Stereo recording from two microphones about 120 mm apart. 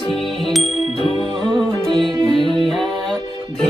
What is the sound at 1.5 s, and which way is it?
Music, centre (ahead or behind).